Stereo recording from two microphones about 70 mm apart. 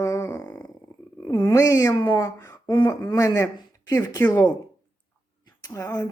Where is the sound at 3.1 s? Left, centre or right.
Left.